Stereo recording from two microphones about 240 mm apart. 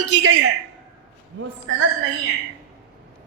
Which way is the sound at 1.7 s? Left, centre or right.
Right.